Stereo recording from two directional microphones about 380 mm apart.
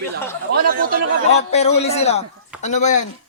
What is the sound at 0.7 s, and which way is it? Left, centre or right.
Speech, right.